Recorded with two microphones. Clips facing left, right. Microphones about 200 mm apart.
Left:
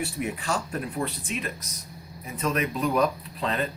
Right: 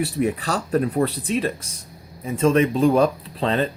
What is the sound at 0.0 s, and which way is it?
Speech, 35° right (ahead or behind).